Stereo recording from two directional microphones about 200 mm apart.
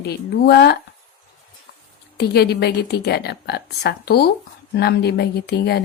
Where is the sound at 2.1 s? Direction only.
55° left (ahead or behind).